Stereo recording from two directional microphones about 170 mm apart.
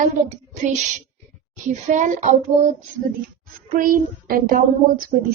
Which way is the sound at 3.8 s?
55° right (ahead or behind).